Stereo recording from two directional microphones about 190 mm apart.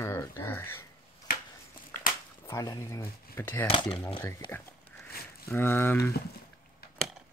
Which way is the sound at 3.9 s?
30° left (ahead or behind).